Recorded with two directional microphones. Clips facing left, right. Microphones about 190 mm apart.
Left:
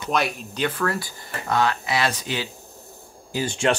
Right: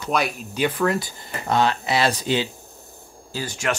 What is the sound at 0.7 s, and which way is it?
Speech, 15° right (ahead or behind).